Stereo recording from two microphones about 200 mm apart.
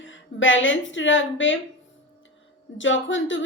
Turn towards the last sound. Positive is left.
turn(degrees=70)  # may be behind; listen again after turning